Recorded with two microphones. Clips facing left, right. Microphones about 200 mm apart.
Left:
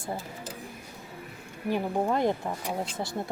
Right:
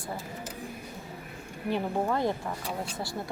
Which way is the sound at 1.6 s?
15° left (ahead or behind).